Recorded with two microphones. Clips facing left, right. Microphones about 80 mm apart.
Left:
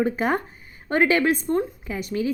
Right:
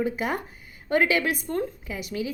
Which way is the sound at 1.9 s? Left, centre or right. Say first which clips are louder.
Left 5 dB; left.